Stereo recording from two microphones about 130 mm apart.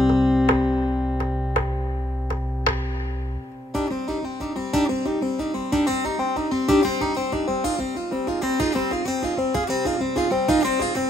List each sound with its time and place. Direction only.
0.0 s music: centre (ahead or behind)
3.7 s music: centre (ahead or behind)